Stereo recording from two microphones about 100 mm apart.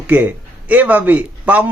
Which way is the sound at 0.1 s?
15° right (ahead or behind).